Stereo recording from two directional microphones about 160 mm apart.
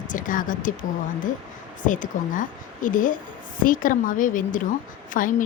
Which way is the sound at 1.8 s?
55° left (ahead or behind).